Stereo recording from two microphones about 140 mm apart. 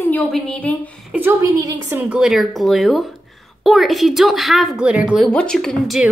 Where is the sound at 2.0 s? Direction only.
10° right (ahead or behind).